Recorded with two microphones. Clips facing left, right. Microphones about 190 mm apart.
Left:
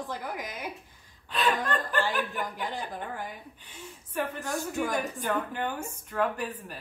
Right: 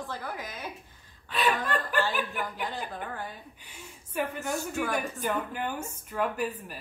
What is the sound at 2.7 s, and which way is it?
Speech, 15° left (ahead or behind).